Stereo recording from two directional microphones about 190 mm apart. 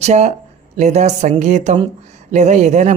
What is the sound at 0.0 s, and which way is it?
Speech, 35° right (ahead or behind).